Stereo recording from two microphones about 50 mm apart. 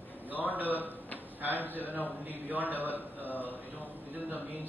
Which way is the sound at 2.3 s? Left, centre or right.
Right.